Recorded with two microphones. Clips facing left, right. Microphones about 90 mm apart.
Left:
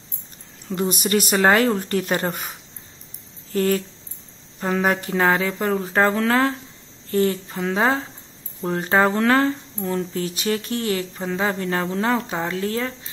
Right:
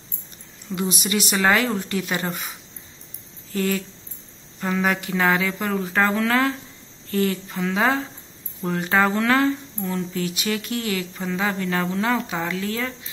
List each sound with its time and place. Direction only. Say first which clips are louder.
0.7 s speech: left 3 dB; 45° left (ahead or behind)
3.5 s speech: left 4 dB; 40° left (ahead or behind)